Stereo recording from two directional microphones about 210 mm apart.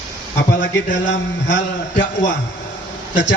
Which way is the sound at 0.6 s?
60° left (ahead or behind).